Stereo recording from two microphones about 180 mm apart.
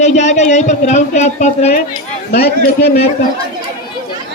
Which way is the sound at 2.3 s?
60° left (ahead or behind).